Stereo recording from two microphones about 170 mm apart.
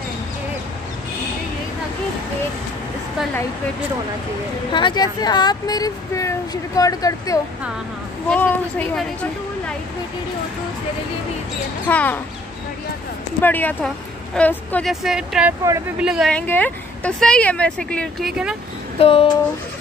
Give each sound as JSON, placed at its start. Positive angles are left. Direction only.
{"t": 4.7, "sound": "speech", "side_deg": 25}
{"t": 8.3, "sound": "speech", "side_deg": 10}
{"t": 11.9, "sound": "speech", "side_deg": 10}
{"t": 13.4, "sound": "speech", "side_deg": 10}
{"t": 14.9, "sound": "speech", "side_deg": -5}
{"t": 18.9, "sound": "a sound", "side_deg": 35}